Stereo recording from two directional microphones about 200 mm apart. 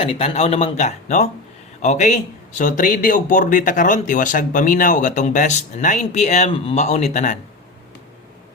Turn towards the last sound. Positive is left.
turn(degrees=40)  # may be behind; listen again after turning